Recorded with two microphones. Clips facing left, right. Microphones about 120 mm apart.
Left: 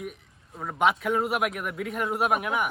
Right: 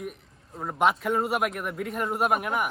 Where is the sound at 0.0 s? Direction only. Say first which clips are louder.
Right 1 dB; centre (ahead or behind).